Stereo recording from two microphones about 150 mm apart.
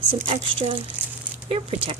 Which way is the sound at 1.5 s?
40° right (ahead or behind).